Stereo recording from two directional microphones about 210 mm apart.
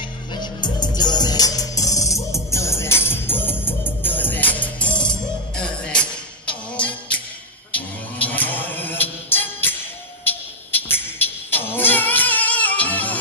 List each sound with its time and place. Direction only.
0.0 s music: 20° left (ahead or behind)